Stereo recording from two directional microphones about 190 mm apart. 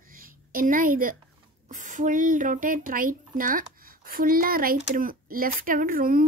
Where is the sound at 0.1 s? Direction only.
45° right (ahead or behind).